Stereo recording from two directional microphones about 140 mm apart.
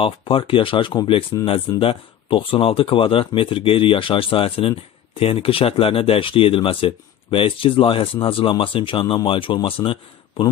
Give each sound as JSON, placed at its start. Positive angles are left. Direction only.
{"t": 0.0, "sound": "speech", "side_deg": 40}